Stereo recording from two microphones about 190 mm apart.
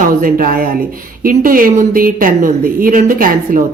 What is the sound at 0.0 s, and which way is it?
A woman's voice, 45° right (ahead or behind).